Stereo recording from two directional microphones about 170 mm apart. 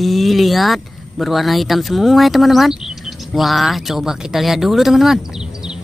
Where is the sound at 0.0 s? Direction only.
Centre (ahead or behind).